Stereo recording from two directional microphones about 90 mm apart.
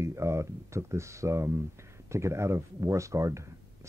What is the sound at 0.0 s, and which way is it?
Speech, 30° right (ahead or behind).